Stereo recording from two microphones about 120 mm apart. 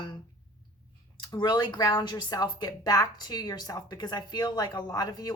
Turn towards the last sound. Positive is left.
turn(degrees=35)  # may be behind; listen again after turning